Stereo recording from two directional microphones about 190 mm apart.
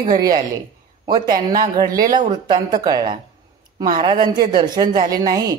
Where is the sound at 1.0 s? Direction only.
20° right (ahead or behind).